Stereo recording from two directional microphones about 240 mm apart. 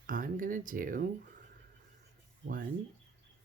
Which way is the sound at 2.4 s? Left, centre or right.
Right.